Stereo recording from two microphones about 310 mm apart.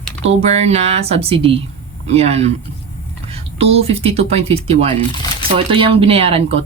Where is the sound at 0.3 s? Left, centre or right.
Centre.